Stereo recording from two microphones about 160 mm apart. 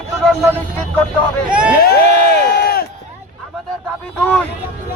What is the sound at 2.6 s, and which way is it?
Run, 70° left (ahead or behind).